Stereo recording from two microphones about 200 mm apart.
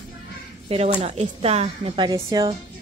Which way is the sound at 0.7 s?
30° right (ahead or behind).